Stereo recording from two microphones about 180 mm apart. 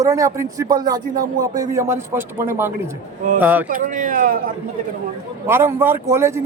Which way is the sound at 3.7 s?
50° right (ahead or behind).